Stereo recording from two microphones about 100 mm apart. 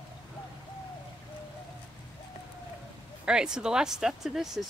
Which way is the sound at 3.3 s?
10° right (ahead or behind).